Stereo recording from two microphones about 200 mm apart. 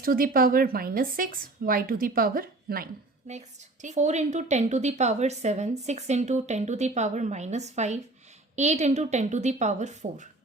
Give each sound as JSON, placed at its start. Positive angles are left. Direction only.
{"t": 0.0, "sound": "speech", "side_deg": -45}